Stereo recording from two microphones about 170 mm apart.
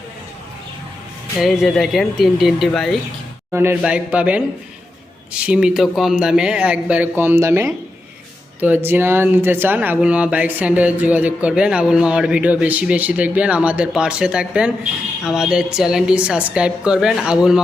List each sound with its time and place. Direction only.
1.4 s a woman's voice: centre (ahead or behind)
3.5 s a woman's voice: 15° right (ahead or behind)